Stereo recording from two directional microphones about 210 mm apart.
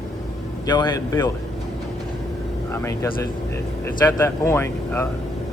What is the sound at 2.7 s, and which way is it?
Speech, 10° left (ahead or behind).